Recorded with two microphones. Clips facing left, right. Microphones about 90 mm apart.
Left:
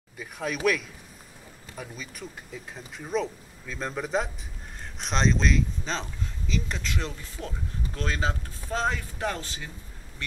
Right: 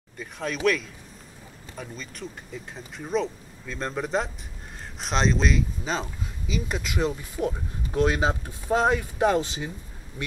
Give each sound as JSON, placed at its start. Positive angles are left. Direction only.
{"t": 0.2, "sound": "speech", "side_deg": 5}
{"t": 1.8, "sound": "speech", "side_deg": 5}